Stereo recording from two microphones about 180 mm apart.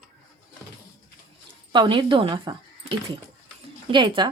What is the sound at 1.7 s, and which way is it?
Speech, 25° right (ahead or behind).